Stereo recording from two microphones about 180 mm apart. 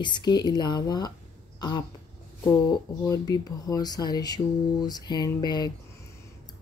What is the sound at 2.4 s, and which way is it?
Speech, 20° left (ahead or behind).